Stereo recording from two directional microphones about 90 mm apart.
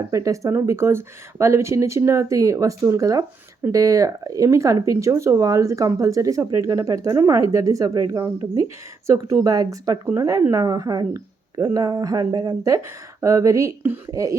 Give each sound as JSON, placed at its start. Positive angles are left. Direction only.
{"t": 0.1, "sound": "a woman's voice", "side_deg": -40}
{"t": 12.6, "sound": "speech", "side_deg": -35}